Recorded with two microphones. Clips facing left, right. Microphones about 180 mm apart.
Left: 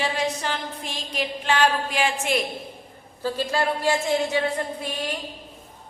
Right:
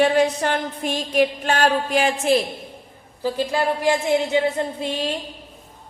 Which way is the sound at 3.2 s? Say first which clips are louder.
Right 3 dB; 15° right (ahead or behind).